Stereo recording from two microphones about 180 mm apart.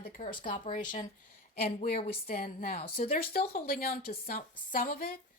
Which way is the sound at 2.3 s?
50° left (ahead or behind).